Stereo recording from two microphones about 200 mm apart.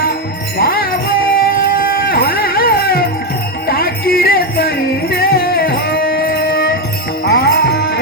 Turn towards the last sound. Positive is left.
turn(degrees=55)  # may be behind; listen again after turning